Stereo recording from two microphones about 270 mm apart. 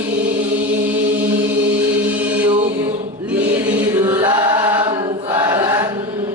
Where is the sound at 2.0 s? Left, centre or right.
Centre.